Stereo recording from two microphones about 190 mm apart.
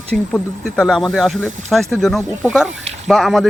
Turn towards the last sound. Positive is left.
turn(degrees=0)  # may be behind; listen again after turning